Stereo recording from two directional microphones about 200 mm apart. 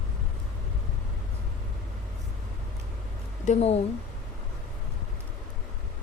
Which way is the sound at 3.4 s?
30° left (ahead or behind).